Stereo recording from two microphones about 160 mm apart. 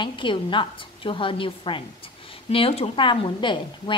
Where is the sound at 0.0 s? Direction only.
30° left (ahead or behind).